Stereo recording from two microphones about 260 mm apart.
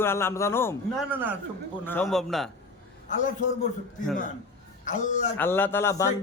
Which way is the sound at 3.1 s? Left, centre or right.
Left.